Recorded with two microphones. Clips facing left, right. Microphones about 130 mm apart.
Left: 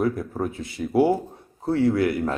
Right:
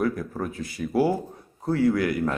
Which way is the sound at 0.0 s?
25° left (ahead or behind).